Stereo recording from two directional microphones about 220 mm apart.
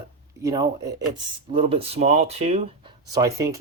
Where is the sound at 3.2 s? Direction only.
15° right (ahead or behind).